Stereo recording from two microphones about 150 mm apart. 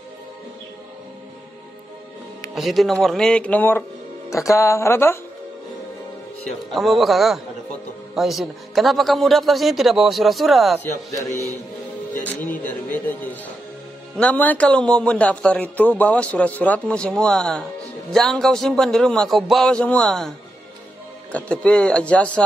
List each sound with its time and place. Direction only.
2.5 s a man's voice: centre (ahead or behind); by 5.2 s 15° left (ahead or behind)
6.7 s a man's voice: centre (ahead or behind)
10.8 s a man's voice: 20° left (ahead or behind)